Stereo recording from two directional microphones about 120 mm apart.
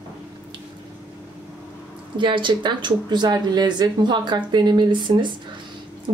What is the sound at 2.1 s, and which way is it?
Speech, 40° right (ahead or behind).